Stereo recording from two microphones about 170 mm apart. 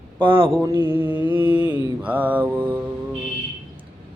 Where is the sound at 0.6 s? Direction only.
15° right (ahead or behind).